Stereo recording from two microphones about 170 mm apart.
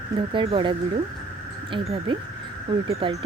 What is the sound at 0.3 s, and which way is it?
Speech, 30° right (ahead or behind).